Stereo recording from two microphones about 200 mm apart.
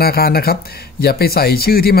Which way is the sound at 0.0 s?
50° left (ahead or behind).